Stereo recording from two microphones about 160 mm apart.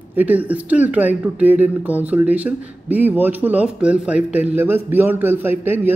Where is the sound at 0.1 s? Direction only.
10° right (ahead or behind).